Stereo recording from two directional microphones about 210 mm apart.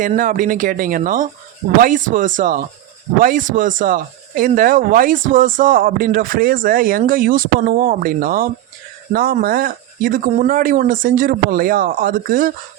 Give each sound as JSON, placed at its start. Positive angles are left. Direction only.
{"t": 0.0, "sound": "speech", "side_deg": -40}